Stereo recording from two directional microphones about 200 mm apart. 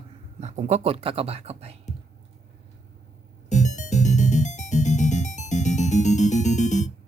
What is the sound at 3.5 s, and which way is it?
Music, 35° left (ahead or behind).